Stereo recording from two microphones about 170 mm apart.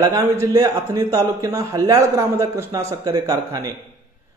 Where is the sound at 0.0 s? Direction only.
20° right (ahead or behind).